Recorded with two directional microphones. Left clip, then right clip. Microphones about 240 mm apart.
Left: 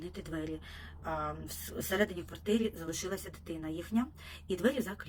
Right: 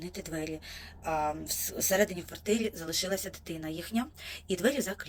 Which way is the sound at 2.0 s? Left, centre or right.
Centre.